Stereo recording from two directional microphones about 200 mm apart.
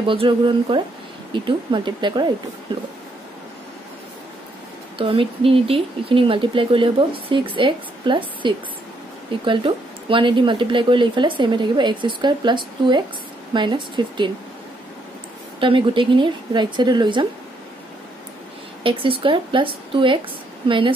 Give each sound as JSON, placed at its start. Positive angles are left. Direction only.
{"t": 0.0, "sound": "speech", "side_deg": -25}
{"t": 4.9, "sound": "speech", "side_deg": -25}
{"t": 15.6, "sound": "speech", "side_deg": -25}
{"t": 18.8, "sound": "speech", "side_deg": -25}